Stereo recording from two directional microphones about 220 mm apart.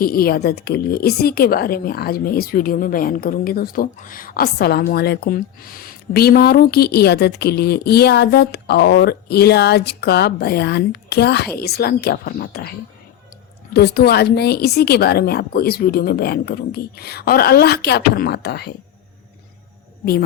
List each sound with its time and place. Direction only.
0.0 s a woman's voice: 40° left (ahead or behind)
13.7 s a woman's voice: 45° left (ahead or behind)